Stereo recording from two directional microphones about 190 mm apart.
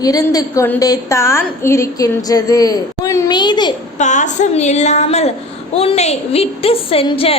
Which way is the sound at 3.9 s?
40° left (ahead or behind).